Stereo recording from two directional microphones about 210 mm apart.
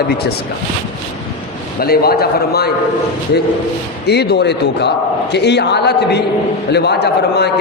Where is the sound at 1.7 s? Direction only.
45° left (ahead or behind).